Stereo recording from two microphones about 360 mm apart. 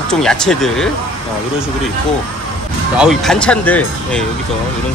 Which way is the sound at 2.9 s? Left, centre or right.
Centre.